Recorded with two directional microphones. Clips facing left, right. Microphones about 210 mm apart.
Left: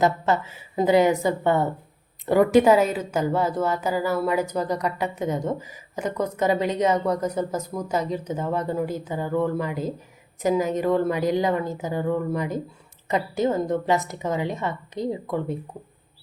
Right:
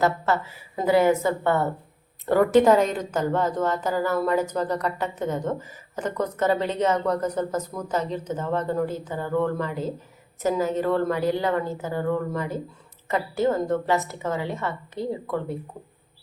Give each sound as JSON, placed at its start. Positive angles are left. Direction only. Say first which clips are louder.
{"t": 0.0, "sound": "a woman's voice", "louder": "left 1 dB", "side_deg": 20}